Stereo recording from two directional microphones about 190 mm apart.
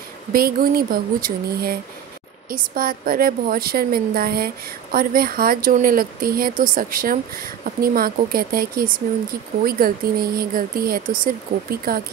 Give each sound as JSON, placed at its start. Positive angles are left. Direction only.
{"t": 0.3, "sound": "speech", "side_deg": -50}